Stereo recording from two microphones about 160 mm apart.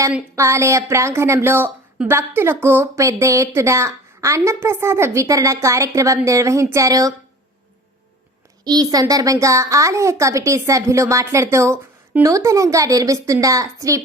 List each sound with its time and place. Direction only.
0.3 s a woman's voice: 20° right (ahead or behind)
8.6 s speech: 25° right (ahead or behind)